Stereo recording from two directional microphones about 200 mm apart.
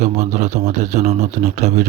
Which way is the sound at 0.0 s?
35° right (ahead or behind).